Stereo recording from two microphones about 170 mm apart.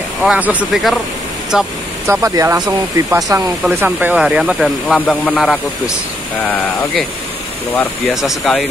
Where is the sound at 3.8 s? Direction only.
10° right (ahead or behind).